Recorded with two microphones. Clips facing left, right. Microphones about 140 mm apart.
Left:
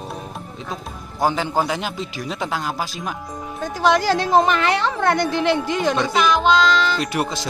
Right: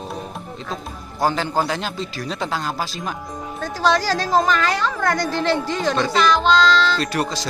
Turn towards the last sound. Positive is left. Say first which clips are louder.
# even
turn(degrees=20)  # may be behind; listen again after turning